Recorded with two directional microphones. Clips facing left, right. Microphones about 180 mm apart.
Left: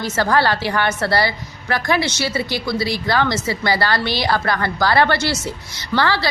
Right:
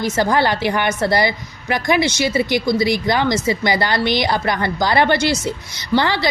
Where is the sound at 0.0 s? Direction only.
15° right (ahead or behind).